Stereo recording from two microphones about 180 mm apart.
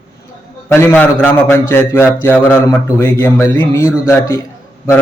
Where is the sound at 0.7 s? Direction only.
10° left (ahead or behind).